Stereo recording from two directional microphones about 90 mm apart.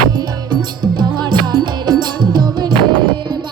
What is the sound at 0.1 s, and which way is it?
Music, 50° right (ahead or behind).